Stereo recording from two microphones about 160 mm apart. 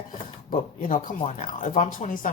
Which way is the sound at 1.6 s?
50° left (ahead or behind).